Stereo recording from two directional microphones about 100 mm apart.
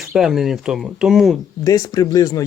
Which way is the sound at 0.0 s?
5° right (ahead or behind).